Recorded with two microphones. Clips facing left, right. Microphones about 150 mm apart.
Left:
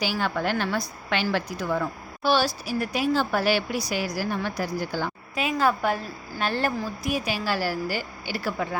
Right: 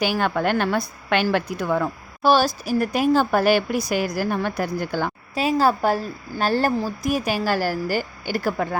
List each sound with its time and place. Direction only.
0.0 s a woman's voice: 55° right (ahead or behind)
2.2 s speech: 45° right (ahead or behind)
5.3 s a woman's voice: 35° right (ahead or behind)